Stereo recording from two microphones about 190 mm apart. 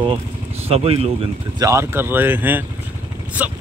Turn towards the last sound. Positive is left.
turn(degrees=-10)  # may be behind; listen again after turning